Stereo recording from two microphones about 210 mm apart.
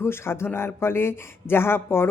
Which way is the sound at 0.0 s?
10° left (ahead or behind).